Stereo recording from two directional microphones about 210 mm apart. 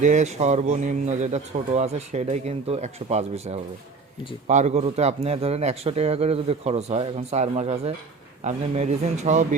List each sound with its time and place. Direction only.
0.0 s a man's voice: 35° right (ahead or behind)